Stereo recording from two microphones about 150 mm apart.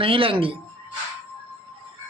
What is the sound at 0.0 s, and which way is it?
Speech, 40° right (ahead or behind).